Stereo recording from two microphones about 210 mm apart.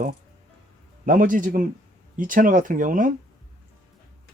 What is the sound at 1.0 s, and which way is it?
Speech, 40° right (ahead or behind).